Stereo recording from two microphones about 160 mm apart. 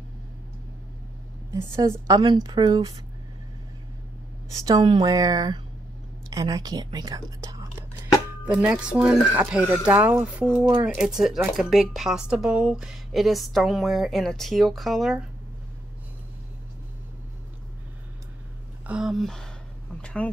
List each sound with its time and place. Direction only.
1.5 s a woman's voice: 15° right (ahead or behind)
4.5 s a woman's voice: 20° right (ahead or behind)
8.5 s speech: 10° right (ahead or behind)
18.9 s speech: 5° right (ahead or behind)
20.0 s a sound: 10° left (ahead or behind)